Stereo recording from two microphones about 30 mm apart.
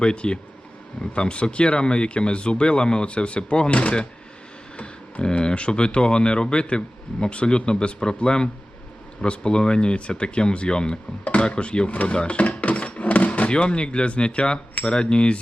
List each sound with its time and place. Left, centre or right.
0.0 s speech: left
3.1 s a man's voice: left
5.4 s speech: left
11.9 s speech: left
12.1 s speech: left
12.5 s a sound: left
13.5 s speech: left